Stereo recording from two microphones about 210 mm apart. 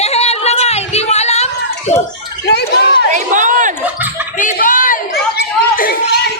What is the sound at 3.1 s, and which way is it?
Crowd, 35° right (ahead or behind).